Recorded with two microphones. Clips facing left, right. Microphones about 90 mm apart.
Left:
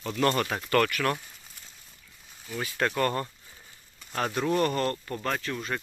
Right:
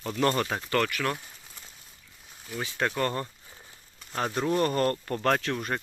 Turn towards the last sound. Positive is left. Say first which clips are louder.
# right 4 dB
turn(degrees=-55)  # may be behind; listen again after turning